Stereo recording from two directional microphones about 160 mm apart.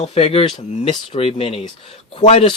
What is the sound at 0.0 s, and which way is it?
Speech, 40° left (ahead or behind).